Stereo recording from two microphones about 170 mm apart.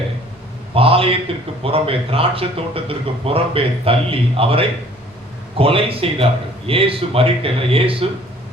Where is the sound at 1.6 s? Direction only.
35° right (ahead or behind).